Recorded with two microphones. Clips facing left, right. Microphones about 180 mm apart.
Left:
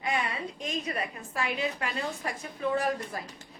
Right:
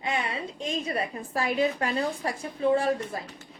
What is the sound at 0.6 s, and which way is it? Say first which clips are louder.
A woman's voice: right 4 dB; 30° right (ahead or behind).